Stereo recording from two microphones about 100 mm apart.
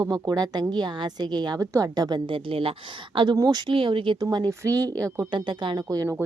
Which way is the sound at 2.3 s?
65° right (ahead or behind).